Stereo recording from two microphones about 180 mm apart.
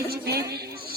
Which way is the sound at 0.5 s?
65° right (ahead or behind).